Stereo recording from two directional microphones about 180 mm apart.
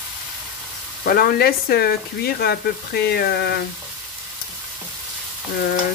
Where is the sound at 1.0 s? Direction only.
55° left (ahead or behind).